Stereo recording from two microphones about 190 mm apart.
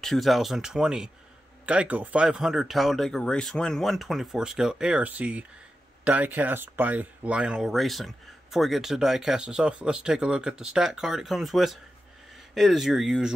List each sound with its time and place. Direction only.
0.0 s speech: centre (ahead or behind)